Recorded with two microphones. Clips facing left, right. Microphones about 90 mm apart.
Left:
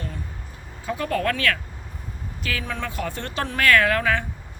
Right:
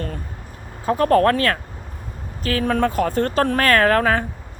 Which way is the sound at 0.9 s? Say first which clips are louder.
Right 9 dB; 45° right (ahead or behind).